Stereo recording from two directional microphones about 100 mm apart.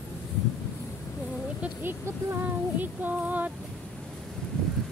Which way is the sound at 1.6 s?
25° right (ahead or behind).